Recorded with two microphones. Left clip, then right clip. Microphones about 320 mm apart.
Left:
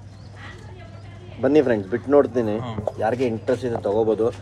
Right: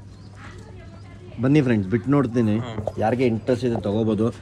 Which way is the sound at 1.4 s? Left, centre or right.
Right.